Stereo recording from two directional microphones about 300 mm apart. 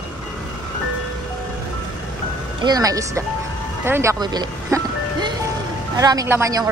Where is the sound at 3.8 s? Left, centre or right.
Centre.